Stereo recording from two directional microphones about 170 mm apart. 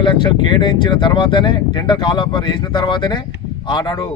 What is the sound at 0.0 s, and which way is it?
Speech, 25° left (ahead or behind).